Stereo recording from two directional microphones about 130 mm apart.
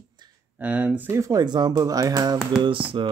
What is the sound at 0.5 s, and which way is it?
Speech, 10° right (ahead or behind).